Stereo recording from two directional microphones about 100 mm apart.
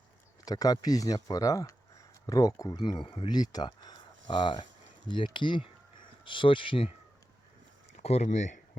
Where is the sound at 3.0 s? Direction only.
55° left (ahead or behind).